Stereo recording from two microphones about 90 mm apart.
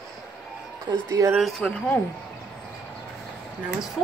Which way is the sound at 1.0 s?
35° right (ahead or behind).